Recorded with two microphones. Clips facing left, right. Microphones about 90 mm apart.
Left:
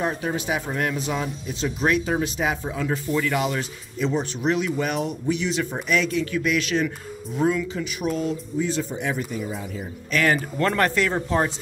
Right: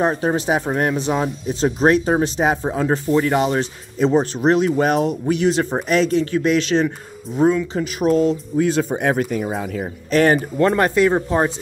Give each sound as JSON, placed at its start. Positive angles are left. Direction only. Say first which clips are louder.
{"t": 0.0, "sound": "speech", "louder": "right 7 dB", "side_deg": -40}
{"t": 5.7, "sound": "speech", "louder": "right 6 dB", "side_deg": -40}
{"t": 7.7, "sound": "speech", "louder": "right 9 dB", "side_deg": -45}
{"t": 8.5, "sound": "speech", "louder": "right 7 dB", "side_deg": -60}
{"t": 10.1, "sound": "speech", "louder": "right 6 dB", "side_deg": -35}
{"t": 10.6, "sound": "speech", "louder": "right 6 dB", "side_deg": -20}